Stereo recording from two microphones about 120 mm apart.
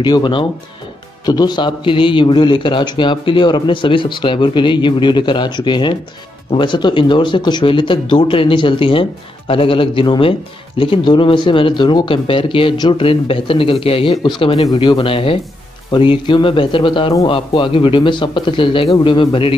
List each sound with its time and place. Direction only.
0.0 s a man's voice: 40° left (ahead or behind)